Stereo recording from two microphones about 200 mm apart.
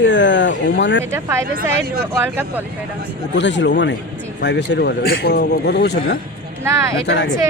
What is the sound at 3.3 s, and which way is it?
A man's voice, 60° left (ahead or behind).